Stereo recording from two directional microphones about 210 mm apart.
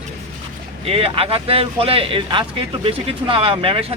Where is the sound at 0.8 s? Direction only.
25° right (ahead or behind).